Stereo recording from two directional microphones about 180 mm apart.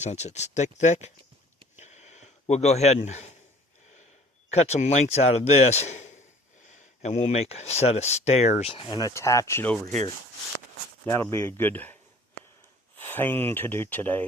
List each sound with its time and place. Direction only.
0.0 s speech: 40° left (ahead or behind)
1.8 s a sound: 40° left (ahead or behind)
4.5 s speech: 40° left (ahead or behind); by 9.7 s 15° left (ahead or behind)
11.0 s speech: 15° left (ahead or behind)
13.0 s speech: 10° left (ahead or behind)